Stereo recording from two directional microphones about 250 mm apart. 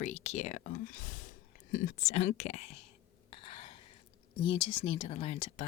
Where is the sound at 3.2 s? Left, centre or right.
Left.